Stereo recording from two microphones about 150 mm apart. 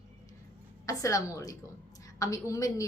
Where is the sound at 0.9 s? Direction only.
20° left (ahead or behind).